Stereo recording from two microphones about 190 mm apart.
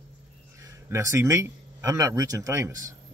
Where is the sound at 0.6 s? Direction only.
15° right (ahead or behind).